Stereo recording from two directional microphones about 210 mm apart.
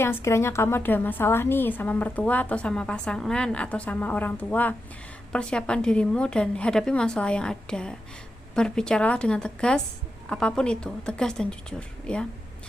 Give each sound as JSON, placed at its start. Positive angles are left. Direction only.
{"t": 0.0, "sound": "a woman's voice", "side_deg": 10}